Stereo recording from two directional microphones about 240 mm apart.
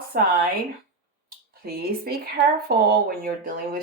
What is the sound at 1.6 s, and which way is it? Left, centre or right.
Speech, right.